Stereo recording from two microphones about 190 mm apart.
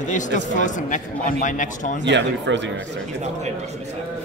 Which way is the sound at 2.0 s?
70° right (ahead or behind).